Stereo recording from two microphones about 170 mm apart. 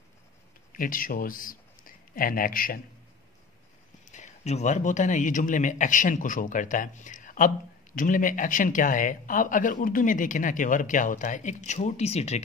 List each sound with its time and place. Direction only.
0.7 s speech: 55° left (ahead or behind)
4.0 s speech: 45° left (ahead or behind)